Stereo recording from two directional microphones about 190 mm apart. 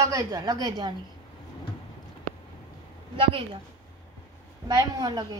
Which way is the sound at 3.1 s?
25° right (ahead or behind).